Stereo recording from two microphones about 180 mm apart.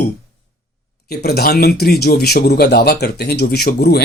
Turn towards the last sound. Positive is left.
turn(degrees=60)  # may be behind; listen again after turning